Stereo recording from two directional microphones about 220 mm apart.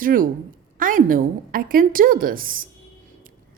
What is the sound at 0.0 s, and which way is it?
A woman's voice, 40° right (ahead or behind).